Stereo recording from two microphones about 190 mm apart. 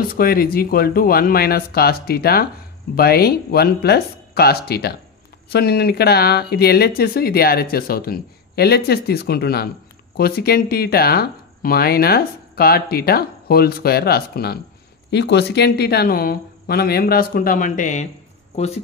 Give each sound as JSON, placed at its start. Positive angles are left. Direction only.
{"t": 0.1, "sound": "speech", "side_deg": 50}